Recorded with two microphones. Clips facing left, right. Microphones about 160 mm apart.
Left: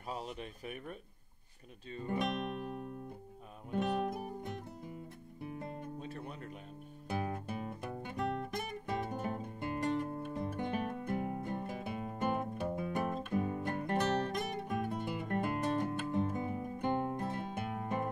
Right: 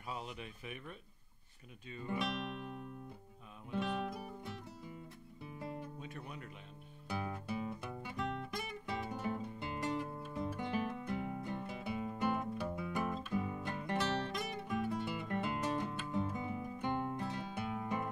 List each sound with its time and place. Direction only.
0.1 s speech: 40° left (ahead or behind)
3.7 s music: 45° left (ahead or behind)
5.9 s speech: 30° left (ahead or behind)
7.1 s guitar: 50° left (ahead or behind)